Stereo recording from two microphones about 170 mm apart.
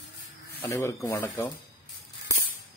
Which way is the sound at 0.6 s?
15° left (ahead or behind).